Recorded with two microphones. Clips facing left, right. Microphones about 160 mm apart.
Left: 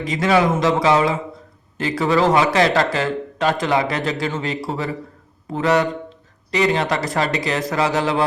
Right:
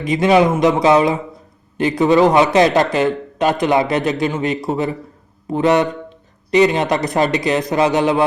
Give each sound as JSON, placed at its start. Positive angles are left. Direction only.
{"t": 0.0, "sound": "speech", "side_deg": -20}